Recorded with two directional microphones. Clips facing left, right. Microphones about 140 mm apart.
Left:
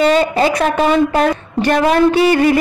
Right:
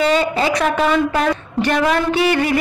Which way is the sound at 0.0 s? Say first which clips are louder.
Left 4 dB; 40° left (ahead or behind).